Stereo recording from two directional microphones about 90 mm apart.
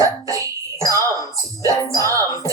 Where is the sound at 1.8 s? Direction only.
35° left (ahead or behind).